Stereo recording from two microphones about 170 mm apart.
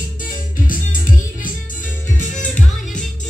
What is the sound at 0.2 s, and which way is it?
Music, 55° left (ahead or behind).